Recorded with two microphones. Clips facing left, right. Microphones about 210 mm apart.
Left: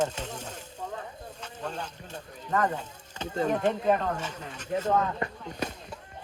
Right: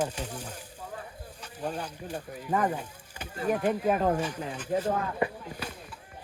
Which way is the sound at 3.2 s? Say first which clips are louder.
Left 2 dB; 25° left (ahead or behind).